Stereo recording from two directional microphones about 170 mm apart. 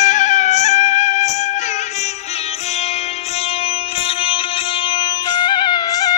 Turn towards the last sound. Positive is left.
turn(degrees=20)  # may be behind; listen again after turning